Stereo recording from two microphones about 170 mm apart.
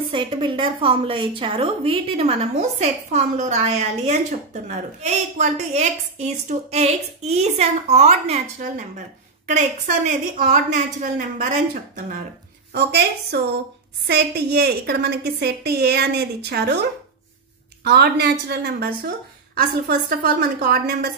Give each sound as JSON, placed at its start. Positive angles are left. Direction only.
{"t": 0.1, "sound": "a woman's voice", "side_deg": -30}
{"t": 12.7, "sound": "a woman's voice", "side_deg": -75}
{"t": 17.8, "sound": "a woman's voice", "side_deg": -70}